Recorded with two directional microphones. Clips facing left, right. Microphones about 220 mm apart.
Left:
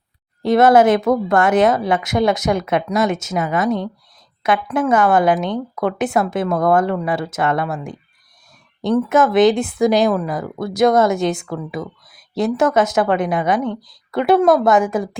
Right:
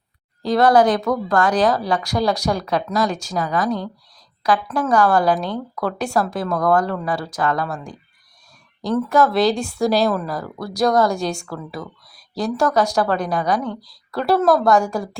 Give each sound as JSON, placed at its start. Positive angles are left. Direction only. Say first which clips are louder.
{"t": 0.4, "sound": "speech", "louder": "left 3 dB", "side_deg": 25}
{"t": 9.0, "sound": "speech", "louder": "left 3 dB", "side_deg": 20}